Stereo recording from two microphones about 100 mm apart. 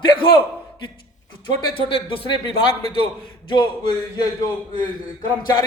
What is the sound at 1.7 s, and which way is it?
A man's voice, 65° left (ahead or behind).